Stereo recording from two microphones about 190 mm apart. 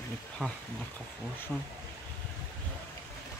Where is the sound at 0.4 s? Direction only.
Centre (ahead or behind).